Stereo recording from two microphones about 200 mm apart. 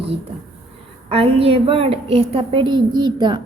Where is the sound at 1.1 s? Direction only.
30° right (ahead or behind).